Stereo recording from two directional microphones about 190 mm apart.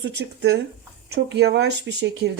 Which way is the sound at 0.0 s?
65° right (ahead or behind).